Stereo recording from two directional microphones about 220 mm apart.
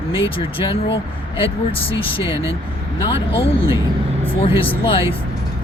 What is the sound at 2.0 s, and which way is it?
Speech, 25° left (ahead or behind).